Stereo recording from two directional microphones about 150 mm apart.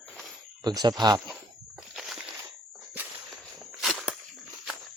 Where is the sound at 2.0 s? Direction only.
5° right (ahead or behind).